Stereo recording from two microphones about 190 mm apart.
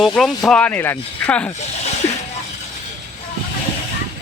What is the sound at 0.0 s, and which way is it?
Speech, centre (ahead or behind).